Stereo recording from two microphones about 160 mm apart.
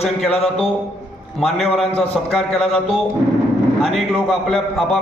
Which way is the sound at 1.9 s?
Centre (ahead or behind).